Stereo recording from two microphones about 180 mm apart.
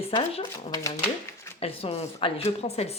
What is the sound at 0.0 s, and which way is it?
Speech, 30° left (ahead or behind).